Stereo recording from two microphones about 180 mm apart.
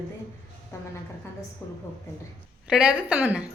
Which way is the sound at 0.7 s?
15° left (ahead or behind).